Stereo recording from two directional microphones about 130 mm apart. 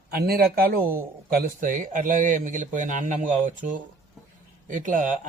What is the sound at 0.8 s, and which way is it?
Speech, 90° right.